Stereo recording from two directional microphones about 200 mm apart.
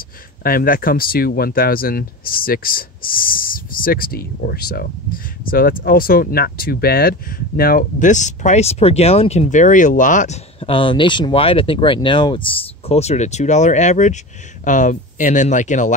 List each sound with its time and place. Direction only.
0.4 s speech: 45° left (ahead or behind)